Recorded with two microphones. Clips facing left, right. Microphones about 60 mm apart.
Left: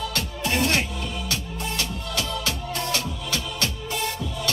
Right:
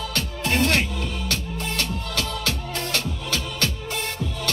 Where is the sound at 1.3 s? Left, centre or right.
Right.